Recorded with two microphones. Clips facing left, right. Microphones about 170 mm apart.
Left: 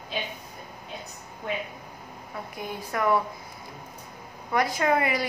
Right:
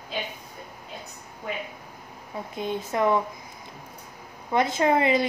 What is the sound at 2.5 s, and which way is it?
Speech, 25° right (ahead or behind).